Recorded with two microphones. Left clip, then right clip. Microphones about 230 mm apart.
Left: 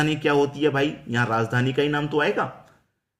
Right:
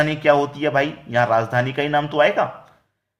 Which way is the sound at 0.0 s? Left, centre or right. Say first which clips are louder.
Right 4 dB; centre.